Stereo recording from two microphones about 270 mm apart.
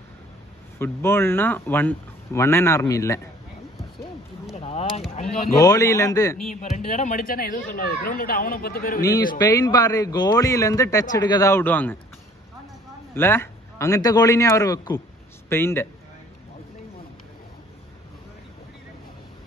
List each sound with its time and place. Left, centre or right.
0.7 s a man's voice: centre
4.6 s speech: left
5.5 s a man's voice: centre
6.8 s speech: left
9.0 s a man's voice: centre
13.1 s a man's voice: centre